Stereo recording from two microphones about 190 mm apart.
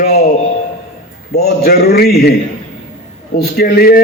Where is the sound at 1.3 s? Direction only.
55° left (ahead or behind).